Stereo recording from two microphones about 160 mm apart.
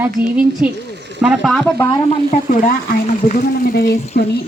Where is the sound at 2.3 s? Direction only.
60° left (ahead or behind).